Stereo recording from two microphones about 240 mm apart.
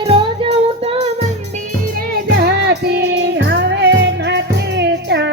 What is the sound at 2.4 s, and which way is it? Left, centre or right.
Music, right.